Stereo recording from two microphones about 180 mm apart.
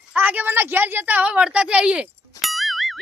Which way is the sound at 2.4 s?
Centre (ahead or behind).